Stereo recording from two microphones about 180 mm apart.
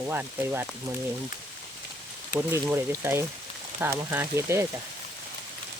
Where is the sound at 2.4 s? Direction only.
15° right (ahead or behind).